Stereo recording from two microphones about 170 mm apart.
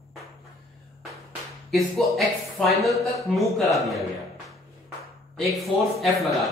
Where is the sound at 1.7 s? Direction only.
Centre (ahead or behind).